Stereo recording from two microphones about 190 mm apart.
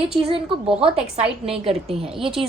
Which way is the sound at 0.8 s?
30° right (ahead or behind).